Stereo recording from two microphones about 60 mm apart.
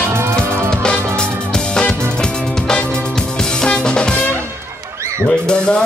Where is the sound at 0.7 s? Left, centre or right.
Centre.